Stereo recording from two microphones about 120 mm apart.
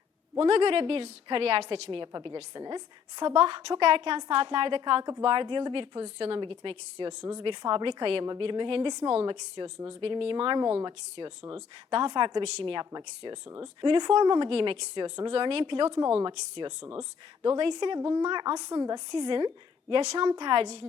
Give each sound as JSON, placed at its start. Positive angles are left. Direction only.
{"t": 0.3, "sound": "a woman's voice", "side_deg": -45}
{"t": 11.9, "sound": "speech", "side_deg": -40}
{"t": 19.9, "sound": "a woman's voice", "side_deg": -50}
{"t": 20.2, "sound": "a woman's voice", "side_deg": -40}